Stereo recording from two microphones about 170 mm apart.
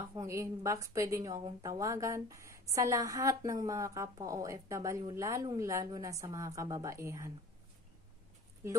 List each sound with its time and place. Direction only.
0.0 s a woman's voice: 20° right (ahead or behind)